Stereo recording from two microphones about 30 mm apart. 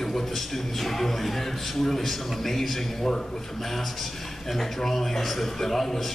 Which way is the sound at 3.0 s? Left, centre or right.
Centre.